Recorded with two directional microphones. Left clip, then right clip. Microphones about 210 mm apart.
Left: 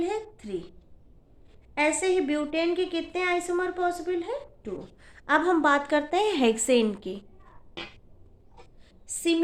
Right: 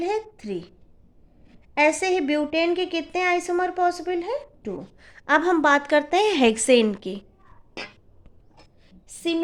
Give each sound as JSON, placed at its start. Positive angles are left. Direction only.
{"t": 0.0, "sound": "a woman's voice", "side_deg": -35}
{"t": 1.7, "sound": "a woman's voice", "side_deg": -35}
{"t": 8.9, "sound": "a sound", "side_deg": -20}